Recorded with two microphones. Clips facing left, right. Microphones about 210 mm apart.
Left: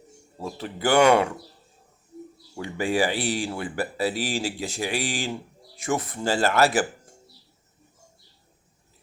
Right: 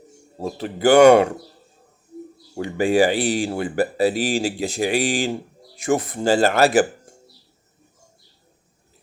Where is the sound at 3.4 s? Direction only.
40° right (ahead or behind).